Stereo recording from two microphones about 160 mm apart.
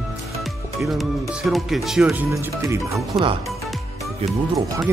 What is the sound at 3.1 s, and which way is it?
Speech, 30° right (ahead or behind).